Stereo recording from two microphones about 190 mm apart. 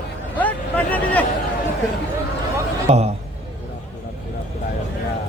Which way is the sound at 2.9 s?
35° right (ahead or behind).